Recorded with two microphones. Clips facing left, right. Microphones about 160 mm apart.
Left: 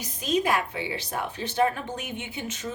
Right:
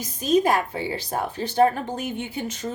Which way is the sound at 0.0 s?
40° right (ahead or behind).